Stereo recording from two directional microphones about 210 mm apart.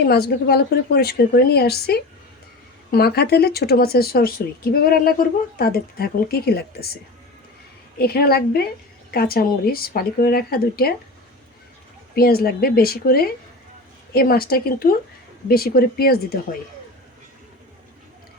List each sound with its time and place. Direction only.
0.0 s speech: 50° left (ahead or behind)
12.1 s speech: 45° left (ahead or behind)